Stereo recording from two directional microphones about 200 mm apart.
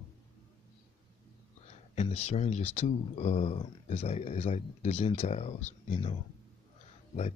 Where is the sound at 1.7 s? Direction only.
35° left (ahead or behind).